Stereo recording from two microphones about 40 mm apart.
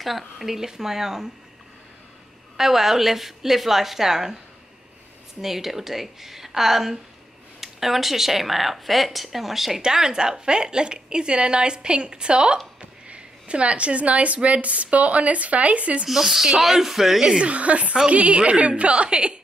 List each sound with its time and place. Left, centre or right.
0.0 s a woman's voice: centre
2.5 s a woman's voice: centre
5.4 s a woman's voice: centre
9.8 s a woman's voice: centre; by 16.1 s right
16.1 s a woman's voice: centre
17.3 s a woman's voice: right